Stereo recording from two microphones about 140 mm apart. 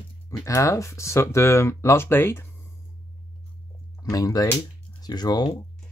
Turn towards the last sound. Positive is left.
turn(degrees=30)  # may be behind; listen again after turning